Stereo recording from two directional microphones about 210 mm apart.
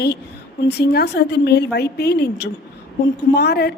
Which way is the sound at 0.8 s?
50° left (ahead or behind).